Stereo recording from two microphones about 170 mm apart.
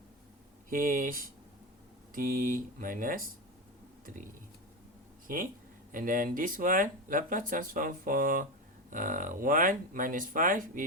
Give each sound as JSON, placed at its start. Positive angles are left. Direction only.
{"t": 0.7, "sound": "speech", "side_deg": -55}
{"t": 5.9, "sound": "speech", "side_deg": -55}